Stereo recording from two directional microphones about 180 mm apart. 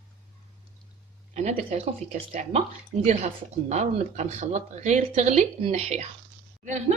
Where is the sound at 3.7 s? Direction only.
40° right (ahead or behind).